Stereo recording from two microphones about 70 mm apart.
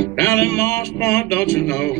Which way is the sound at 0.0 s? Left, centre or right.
Left.